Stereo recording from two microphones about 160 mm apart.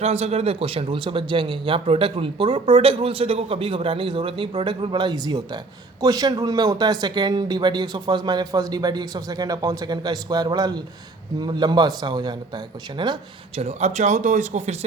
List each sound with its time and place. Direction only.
0.0 s speech: 40° right (ahead or behind)
13.6 s speech: 45° right (ahead or behind)